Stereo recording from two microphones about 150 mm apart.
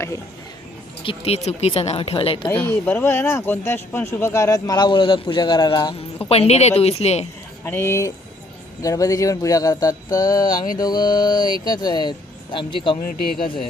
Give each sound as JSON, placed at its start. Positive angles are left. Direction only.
{"t": 1.0, "sound": "speech", "side_deg": 45}
{"t": 2.5, "sound": "speech", "side_deg": 15}
{"t": 7.6, "sound": "speech", "side_deg": 15}